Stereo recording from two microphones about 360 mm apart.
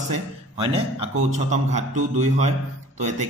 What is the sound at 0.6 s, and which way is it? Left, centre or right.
A man's voice, centre.